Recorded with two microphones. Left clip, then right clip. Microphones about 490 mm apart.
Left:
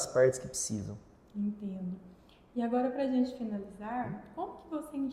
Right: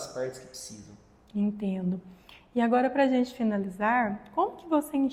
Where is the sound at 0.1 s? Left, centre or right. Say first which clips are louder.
Left 9 dB; left.